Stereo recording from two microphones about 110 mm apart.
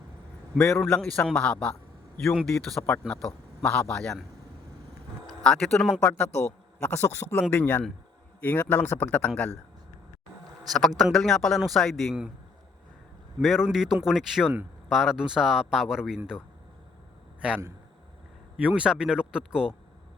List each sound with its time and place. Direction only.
0.7 s speech: 10° left (ahead or behind)
5.2 s speech: 5° left (ahead or behind)
6.0 s a man's voice: 15° left (ahead or behind)
10.7 s speech: centre (ahead or behind)
13.4 s speech: 5° right (ahead or behind)
18.5 s speech: 10° right (ahead or behind)